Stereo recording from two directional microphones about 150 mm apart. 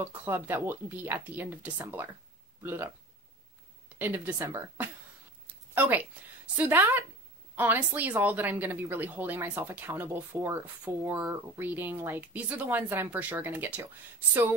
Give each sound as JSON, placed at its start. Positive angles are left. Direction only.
{"t": 0.0, "sound": "a woman's voice", "side_deg": -15}
{"t": 4.0, "sound": "a woman's voice", "side_deg": -15}